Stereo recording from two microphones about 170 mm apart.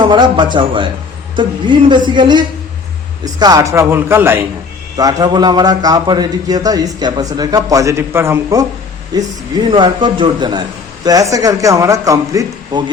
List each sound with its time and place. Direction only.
0.0 s a man's voice: 25° right (ahead or behind)